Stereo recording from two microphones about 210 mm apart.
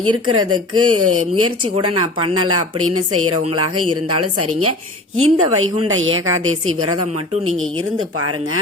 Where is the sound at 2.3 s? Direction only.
90° right; by 6.3 s 75° right (ahead or behind).